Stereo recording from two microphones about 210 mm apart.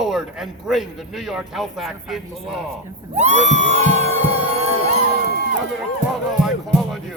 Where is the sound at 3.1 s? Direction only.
35° right (ahead or behind).